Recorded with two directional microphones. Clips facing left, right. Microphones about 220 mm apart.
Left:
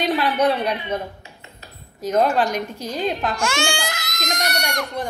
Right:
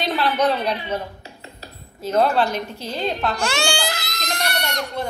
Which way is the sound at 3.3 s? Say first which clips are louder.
Even; 35° right (ahead or behind).